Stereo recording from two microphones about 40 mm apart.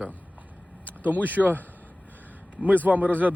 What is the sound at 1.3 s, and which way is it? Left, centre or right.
Speech, right.